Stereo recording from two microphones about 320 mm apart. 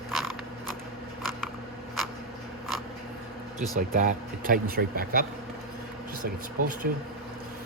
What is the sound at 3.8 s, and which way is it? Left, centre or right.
Speech, right.